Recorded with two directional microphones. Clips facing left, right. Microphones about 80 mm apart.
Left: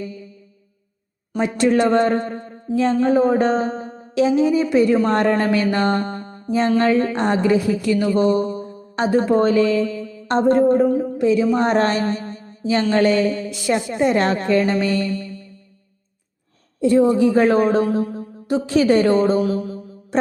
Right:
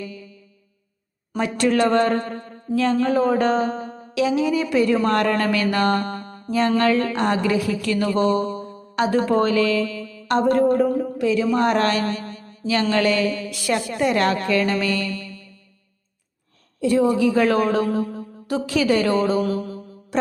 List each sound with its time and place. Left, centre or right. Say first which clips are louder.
0.0 s mantra: left 3 dB; left
1.4 s a woman's voice: left 2 dB; left
5.7 s music: left 1 dB; left
6.7 s a woman's voice: left 2 dB; centre
10.8 s speech: left 3 dB; centre
11.2 s a man's voice: left 2 dB; left
16.8 s a woman's voice: left 3 dB; left
18.4 s a woman's voice: left 4 dB; left
19.4 s mantra: left 2 dB; centre